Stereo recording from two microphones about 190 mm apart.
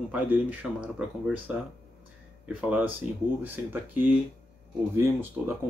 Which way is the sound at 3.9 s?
10° right (ahead or behind).